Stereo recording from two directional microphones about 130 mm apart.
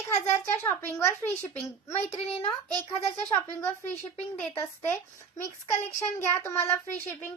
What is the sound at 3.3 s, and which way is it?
A child's voice, 15° left (ahead or behind).